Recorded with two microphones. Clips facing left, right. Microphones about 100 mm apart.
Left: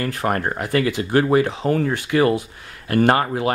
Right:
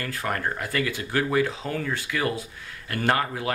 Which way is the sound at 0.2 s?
40° left (ahead or behind).